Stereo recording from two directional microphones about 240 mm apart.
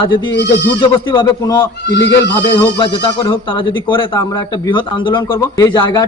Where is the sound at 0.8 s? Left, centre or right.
Centre.